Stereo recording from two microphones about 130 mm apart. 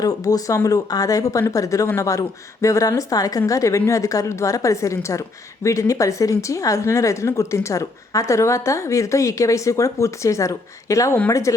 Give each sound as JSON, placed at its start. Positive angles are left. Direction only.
{"t": 0.0, "sound": "speech", "side_deg": 30}